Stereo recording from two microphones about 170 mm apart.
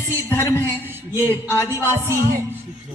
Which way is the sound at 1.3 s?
15° left (ahead or behind).